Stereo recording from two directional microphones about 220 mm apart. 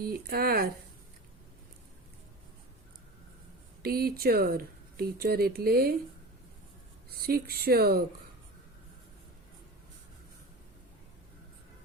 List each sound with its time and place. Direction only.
0.0 s speech: 45° right (ahead or behind)
3.8 s speech: 45° right (ahead or behind)
7.3 s speech: 45° right (ahead or behind)